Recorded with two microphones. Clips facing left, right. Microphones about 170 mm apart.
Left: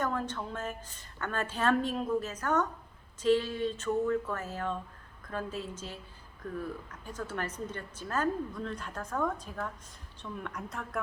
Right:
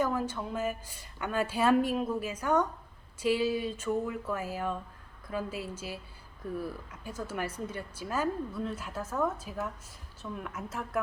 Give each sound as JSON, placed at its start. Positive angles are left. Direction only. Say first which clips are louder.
{"t": 0.0, "sound": "a woman's voice", "louder": "right 3 dB", "side_deg": -10}